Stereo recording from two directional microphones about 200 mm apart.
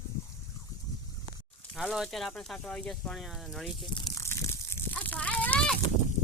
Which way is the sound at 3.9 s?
25° left (ahead or behind).